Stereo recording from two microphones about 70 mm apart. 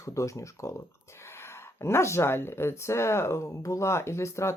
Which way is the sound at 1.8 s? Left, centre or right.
Left.